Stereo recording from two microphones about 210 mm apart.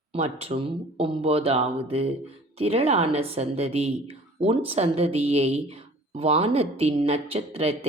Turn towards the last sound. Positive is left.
turn(degrees=-30)  # may be behind; listen again after turning